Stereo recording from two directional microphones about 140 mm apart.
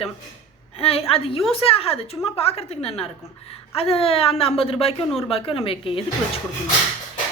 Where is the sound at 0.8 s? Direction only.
45° left (ahead or behind).